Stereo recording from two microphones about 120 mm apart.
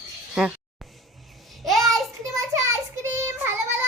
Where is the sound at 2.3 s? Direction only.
25° right (ahead or behind).